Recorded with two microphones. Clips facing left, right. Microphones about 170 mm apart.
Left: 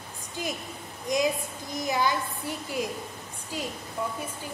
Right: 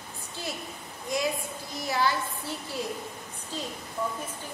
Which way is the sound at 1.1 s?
20° left (ahead or behind).